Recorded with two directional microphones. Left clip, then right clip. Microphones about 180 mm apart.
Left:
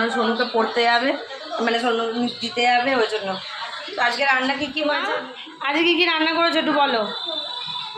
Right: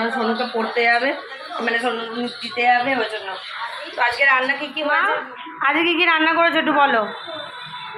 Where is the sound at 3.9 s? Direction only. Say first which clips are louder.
Right 3 dB; 15° left (ahead or behind).